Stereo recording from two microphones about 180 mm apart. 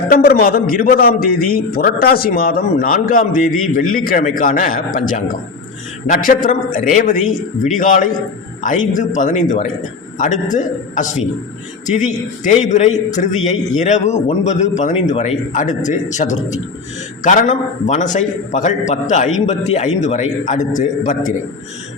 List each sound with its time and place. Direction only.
0.1 s a man's voice: 55° left (ahead or behind)